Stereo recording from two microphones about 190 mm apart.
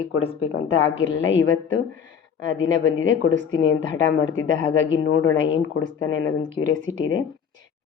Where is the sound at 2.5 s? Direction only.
90° left.